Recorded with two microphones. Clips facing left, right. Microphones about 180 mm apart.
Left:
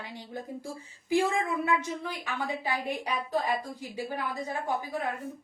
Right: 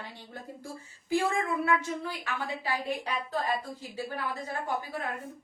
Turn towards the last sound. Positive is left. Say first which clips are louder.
# left 2 dB
turn(degrees=15)  # may be behind; listen again after turning